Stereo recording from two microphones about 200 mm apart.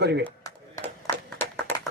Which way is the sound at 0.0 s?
55° right (ahead or behind).